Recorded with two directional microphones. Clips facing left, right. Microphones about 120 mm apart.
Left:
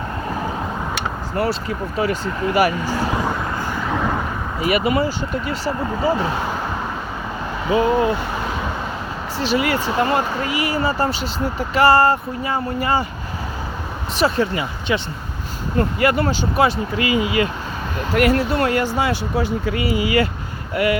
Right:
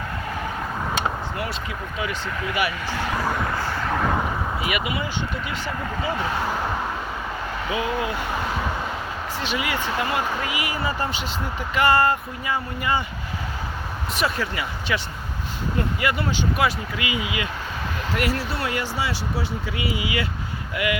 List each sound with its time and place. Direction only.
2.0 s speech: 40° left (ahead or behind)
3.2 s vehicle: 15° left (ahead or behind)
4.6 s speech: 40° left (ahead or behind)
7.7 s speech: 35° left (ahead or behind)
9.4 s speech: 40° left (ahead or behind)
14.2 s speech: 30° left (ahead or behind)
15.8 s speech: 45° left (ahead or behind)
18.1 s speech: 55° left (ahead or behind); by 20.9 s 40° left (ahead or behind)